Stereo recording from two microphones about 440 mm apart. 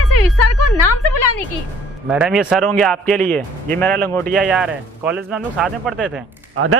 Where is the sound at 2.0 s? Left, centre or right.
Centre.